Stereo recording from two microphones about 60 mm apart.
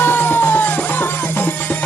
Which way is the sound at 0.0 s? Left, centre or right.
Left.